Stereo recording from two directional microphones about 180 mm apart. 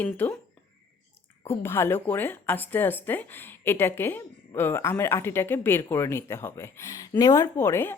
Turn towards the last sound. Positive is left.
turn(degrees=15)  # may be behind; listen again after turning